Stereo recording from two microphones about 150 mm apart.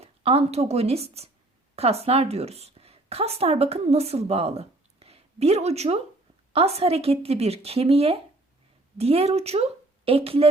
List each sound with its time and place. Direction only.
0.0 s a woman's voice: 40° right (ahead or behind)